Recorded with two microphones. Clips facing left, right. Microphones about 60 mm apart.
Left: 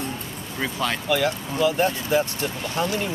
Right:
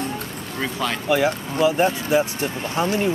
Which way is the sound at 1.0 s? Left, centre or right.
Centre.